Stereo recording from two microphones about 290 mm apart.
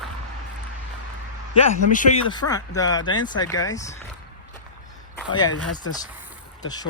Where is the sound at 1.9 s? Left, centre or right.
Left.